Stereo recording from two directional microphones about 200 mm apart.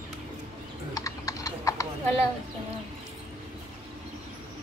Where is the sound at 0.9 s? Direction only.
15° left (ahead or behind).